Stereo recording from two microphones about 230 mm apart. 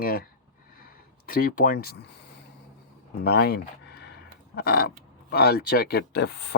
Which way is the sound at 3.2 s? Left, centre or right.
Left.